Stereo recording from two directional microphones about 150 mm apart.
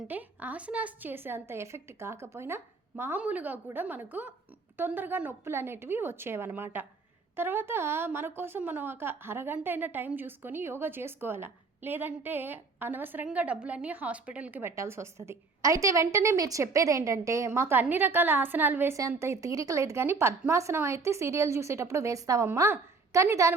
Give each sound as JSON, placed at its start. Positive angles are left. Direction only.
{"t": 0.1, "sound": "a woman's voice", "side_deg": -10}